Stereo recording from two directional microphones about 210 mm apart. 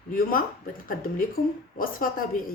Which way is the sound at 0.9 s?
40° left (ahead or behind).